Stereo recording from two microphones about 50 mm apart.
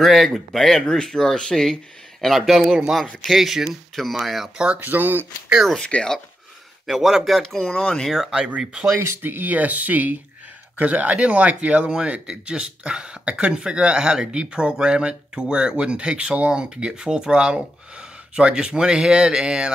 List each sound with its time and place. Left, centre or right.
0.0 s speech: centre
2.2 s speech: centre
4.7 s speech: right
5.9 s speech: left
6.9 s speech: centre
7.6 s speech: left
8.0 s speech: centre
8.5 s speech: centre
8.9 s speech: right
9.2 s speech: right; by 19.7 s centre